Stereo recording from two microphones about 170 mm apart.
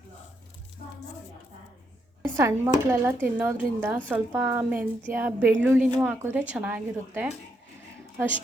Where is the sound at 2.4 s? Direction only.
15° right (ahead or behind).